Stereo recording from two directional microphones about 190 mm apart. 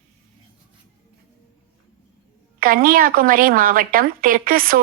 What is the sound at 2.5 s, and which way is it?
A woman's voice, 50° right (ahead or behind).